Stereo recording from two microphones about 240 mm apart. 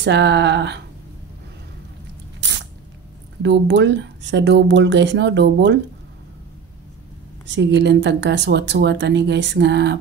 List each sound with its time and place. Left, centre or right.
0.0 s speech: right
3.4 s speech: right
7.4 s speech: right